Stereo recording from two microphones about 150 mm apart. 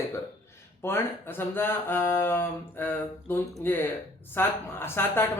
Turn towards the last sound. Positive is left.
turn(degrees=15)  # may be behind; listen again after turning